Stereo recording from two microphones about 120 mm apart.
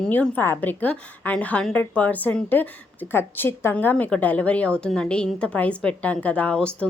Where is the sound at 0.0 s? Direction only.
10° left (ahead or behind).